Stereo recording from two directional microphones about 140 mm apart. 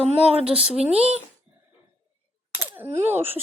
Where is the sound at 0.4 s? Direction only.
5° right (ahead or behind).